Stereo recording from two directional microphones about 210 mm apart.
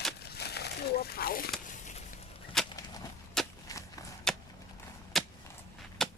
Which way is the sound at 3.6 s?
15° left (ahead or behind).